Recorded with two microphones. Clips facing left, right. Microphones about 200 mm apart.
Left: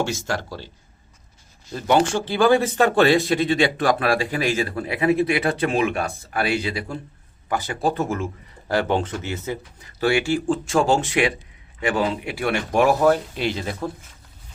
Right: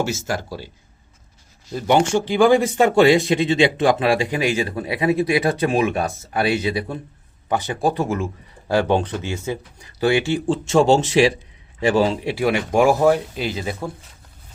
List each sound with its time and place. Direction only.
0.0 s speech: 5° right (ahead or behind)
1.7 s speech: 15° right (ahead or behind)